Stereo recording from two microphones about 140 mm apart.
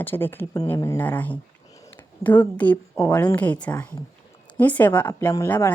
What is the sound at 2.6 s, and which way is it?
A woman's voice, 10° left (ahead or behind).